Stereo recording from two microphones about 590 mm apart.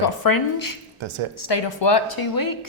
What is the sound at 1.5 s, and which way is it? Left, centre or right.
Speech, left.